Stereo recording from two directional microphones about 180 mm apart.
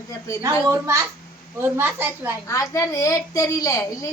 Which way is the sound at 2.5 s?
15° left (ahead or behind).